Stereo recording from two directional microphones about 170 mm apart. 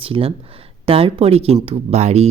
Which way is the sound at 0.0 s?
35° right (ahead or behind).